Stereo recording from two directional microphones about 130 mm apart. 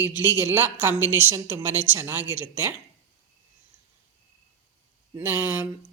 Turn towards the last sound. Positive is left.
turn(degrees=-15)  # may be behind; listen again after turning